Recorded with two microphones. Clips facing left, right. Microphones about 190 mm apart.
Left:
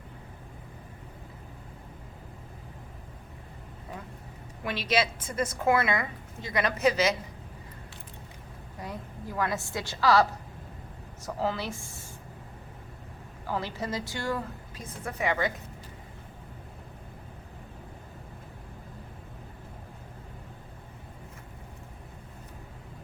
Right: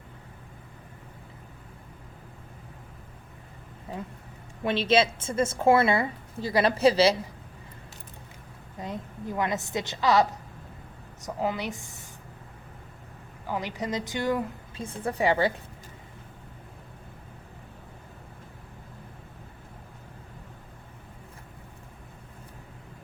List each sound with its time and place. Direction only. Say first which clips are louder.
4.6 s a woman's voice: right 5 dB; 25° right (ahead or behind)
8.8 s a woman's voice: right 4 dB; 20° right (ahead or behind)
13.5 s a woman's voice: right 2 dB; 15° right (ahead or behind)